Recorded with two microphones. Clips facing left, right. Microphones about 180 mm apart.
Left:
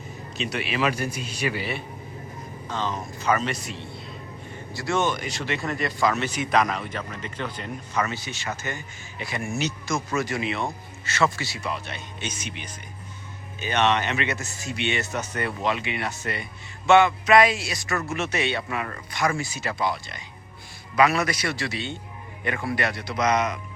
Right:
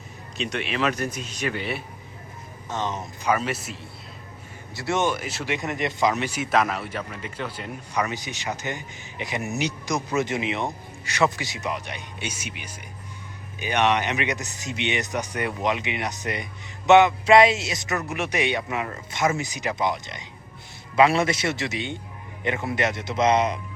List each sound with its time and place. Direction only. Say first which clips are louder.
0.3 s a man's voice: even; 5° left (ahead or behind)
3.2 s speech: even; 10° right (ahead or behind)
4.7 s speech: right 1 dB; 20° right (ahead or behind)
5.1 s speech: right 1 dB; 5° right (ahead or behind)
5.5 s speech: right 1 dB; 20° right (ahead or behind)